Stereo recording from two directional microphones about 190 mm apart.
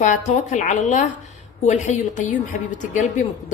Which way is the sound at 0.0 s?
40° left (ahead or behind).